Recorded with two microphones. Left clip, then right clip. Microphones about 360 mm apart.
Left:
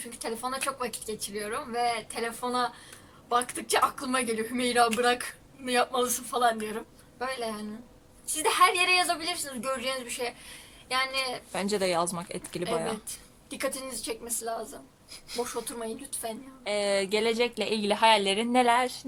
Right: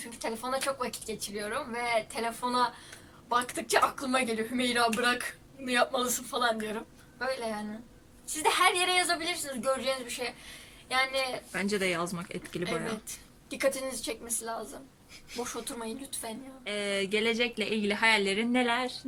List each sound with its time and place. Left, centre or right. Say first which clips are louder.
0.2 s speech: even; centre
16.6 s speech: left 5 dB; centre